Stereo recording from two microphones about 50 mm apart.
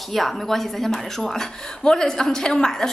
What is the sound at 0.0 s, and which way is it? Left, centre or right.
A woman's voice, centre.